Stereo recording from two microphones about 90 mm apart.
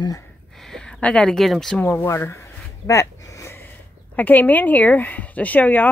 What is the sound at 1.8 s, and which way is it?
Speech, 15° left (ahead or behind).